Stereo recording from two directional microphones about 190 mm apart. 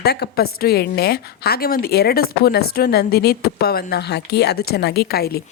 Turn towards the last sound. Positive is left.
turn(degrees=55)  # may be behind; listen again after turning